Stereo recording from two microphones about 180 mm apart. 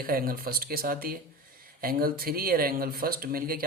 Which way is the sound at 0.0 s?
55° right (ahead or behind).